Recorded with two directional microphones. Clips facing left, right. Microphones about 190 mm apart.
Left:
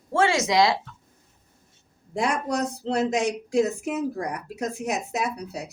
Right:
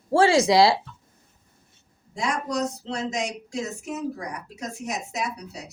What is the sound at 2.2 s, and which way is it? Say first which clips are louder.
Speech: left 2 dB; 55° left (ahead or behind).